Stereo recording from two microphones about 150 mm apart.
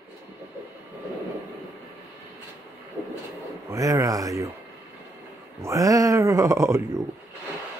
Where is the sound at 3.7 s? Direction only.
20° right (ahead or behind).